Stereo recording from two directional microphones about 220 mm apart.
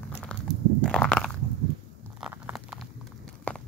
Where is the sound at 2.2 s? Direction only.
5° right (ahead or behind).